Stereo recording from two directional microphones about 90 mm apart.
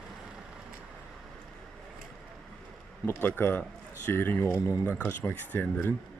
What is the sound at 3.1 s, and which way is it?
Speech, 25° left (ahead or behind).